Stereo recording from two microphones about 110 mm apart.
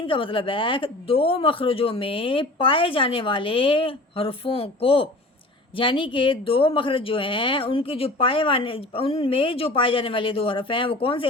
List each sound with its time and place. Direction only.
0.0 s speech: 50° left (ahead or behind)